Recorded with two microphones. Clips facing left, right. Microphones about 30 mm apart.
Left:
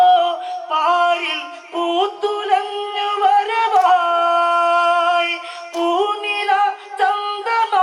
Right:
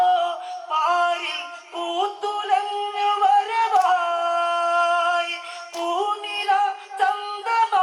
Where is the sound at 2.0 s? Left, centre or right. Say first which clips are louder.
Left 5 dB; left.